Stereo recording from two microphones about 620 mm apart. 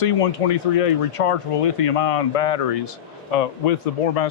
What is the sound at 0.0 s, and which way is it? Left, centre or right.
Speech, left.